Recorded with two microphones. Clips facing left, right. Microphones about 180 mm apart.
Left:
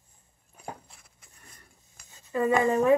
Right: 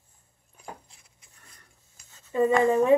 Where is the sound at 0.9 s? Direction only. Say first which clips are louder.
Left 3 dB; 55° left (ahead or behind).